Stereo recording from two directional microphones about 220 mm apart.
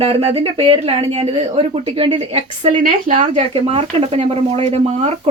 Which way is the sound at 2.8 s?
35° right (ahead or behind).